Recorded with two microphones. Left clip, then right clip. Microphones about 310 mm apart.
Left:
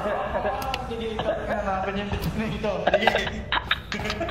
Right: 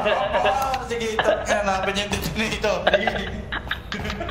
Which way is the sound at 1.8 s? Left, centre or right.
Right.